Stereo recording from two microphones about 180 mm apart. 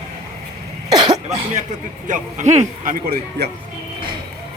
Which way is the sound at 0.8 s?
25° right (ahead or behind).